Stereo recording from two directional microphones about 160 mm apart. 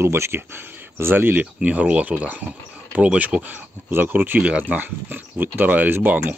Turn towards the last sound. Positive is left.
turn(degrees=-10)  # may be behind; listen again after turning